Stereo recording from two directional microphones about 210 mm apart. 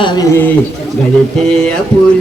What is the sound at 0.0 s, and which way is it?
Speech, 20° left (ahead or behind).